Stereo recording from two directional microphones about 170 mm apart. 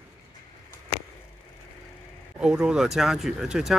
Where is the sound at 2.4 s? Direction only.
5° right (ahead or behind).